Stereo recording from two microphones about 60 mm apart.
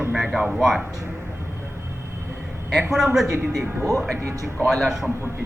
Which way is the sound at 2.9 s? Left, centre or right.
Centre.